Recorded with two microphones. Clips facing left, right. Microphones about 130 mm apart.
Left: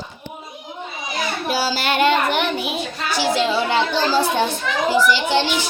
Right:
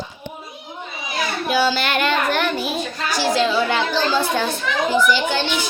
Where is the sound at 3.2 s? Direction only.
25° left (ahead or behind).